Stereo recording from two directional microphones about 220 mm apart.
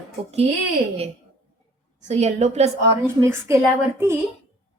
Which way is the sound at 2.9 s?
10° right (ahead or behind).